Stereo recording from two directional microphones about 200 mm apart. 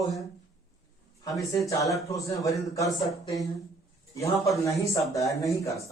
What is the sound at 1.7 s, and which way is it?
Speech, 15° left (ahead or behind).